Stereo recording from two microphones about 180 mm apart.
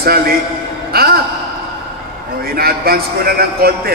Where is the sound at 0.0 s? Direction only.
55° right (ahead or behind).